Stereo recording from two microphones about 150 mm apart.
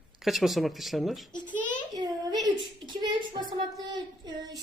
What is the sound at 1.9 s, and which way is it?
A child's voice, 25° right (ahead or behind).